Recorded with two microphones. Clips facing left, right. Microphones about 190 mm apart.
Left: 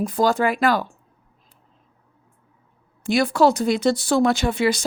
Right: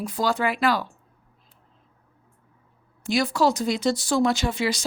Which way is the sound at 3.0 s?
55° left (ahead or behind).